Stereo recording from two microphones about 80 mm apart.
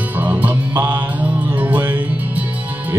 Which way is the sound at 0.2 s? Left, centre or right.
Right.